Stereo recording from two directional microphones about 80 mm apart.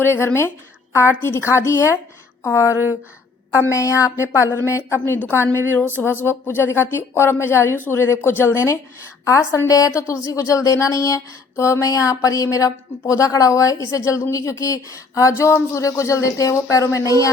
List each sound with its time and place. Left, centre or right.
0.0 s a woman's voice: left
9.6 s speech: left